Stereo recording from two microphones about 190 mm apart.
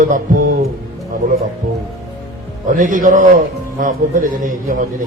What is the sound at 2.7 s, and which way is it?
A man's voice, 45° right (ahead or behind).